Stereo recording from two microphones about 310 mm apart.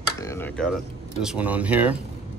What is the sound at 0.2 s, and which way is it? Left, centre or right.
Speech, centre.